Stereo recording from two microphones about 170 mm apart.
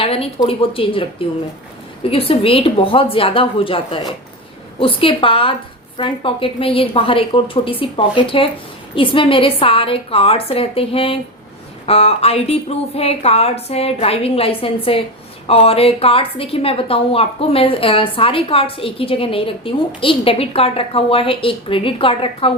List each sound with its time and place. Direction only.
0.0 s a woman's voice: 35° left (ahead or behind)